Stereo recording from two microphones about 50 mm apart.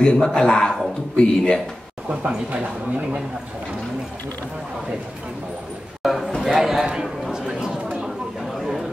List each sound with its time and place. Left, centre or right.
0.0 s speech: centre
6.0 s a man's voice: centre
7.2 s chatter: centre